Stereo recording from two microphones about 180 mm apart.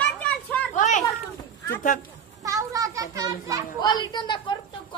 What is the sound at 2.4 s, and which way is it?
Children playing, 20° right (ahead or behind).